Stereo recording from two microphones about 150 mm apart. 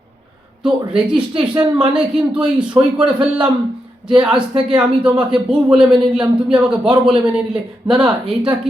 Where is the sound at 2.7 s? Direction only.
30° right (ahead or behind).